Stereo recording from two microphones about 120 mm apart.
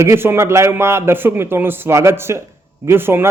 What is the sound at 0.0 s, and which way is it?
A man's voice, 20° right (ahead or behind).